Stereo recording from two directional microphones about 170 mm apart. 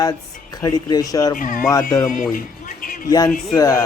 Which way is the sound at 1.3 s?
50° left (ahead or behind).